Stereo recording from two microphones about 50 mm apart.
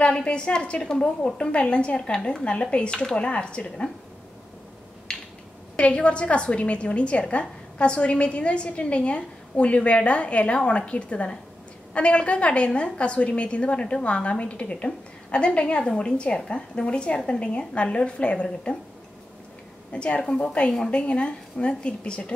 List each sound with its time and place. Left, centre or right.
0.0 s a woman's voice: centre
5.1 s a sound: centre
5.8 s a woman's voice: left
19.9 s a woman's voice: left